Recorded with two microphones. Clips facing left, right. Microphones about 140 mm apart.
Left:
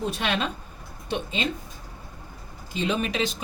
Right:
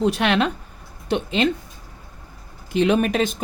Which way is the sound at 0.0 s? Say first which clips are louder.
Right 8 dB; 70° right (ahead or behind).